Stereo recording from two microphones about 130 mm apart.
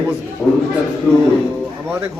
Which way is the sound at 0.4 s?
10° left (ahead or behind).